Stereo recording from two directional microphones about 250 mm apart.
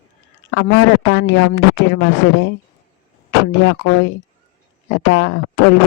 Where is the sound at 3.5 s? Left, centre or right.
Left.